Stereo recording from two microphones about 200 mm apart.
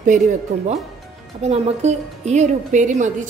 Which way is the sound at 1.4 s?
35° right (ahead or behind).